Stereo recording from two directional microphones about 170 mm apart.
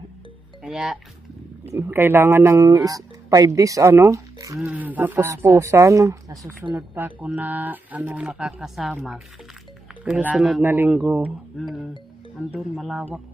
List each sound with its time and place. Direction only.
0.7 s speech: centre (ahead or behind)
1.8 s speech: 15° right (ahead or behind)
4.6 s speech: 5° right (ahead or behind)